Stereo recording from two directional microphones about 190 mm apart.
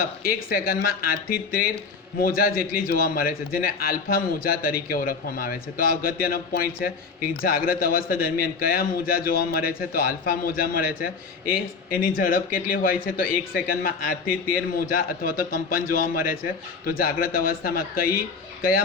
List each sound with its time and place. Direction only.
0.0 s a man's voice: 50° left (ahead or behind)